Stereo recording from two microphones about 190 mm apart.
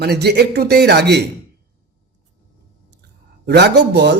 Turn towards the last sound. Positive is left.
turn(degrees=-65)  # may be behind; listen again after turning